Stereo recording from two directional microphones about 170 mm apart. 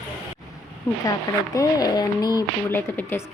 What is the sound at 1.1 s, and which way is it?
Speech, 20° left (ahead or behind).